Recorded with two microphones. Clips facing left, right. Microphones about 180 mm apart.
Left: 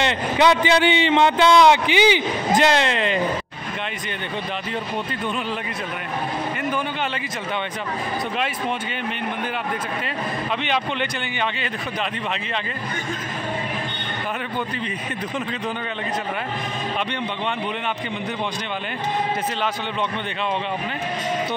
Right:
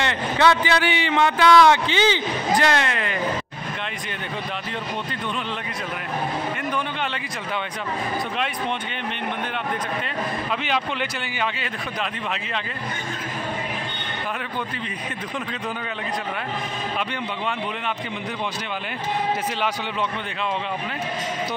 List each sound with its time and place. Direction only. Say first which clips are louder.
0.0 s speech: left 2 dB; 20° left (ahead or behind)
10.6 s a man's voice: left 2 dB; 5° right (ahead or behind)